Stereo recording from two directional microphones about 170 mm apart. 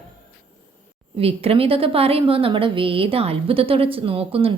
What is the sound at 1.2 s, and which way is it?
A woman's voice, 35° right (ahead or behind).